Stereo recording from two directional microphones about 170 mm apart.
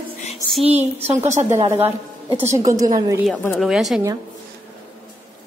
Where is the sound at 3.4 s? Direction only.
Centre (ahead or behind).